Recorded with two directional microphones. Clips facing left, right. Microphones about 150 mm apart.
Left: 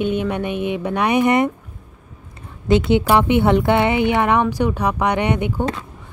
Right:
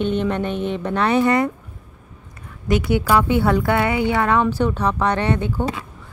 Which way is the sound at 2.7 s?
25° left (ahead or behind).